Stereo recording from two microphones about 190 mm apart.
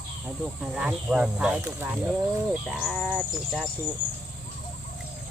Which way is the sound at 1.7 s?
10° right (ahead or behind).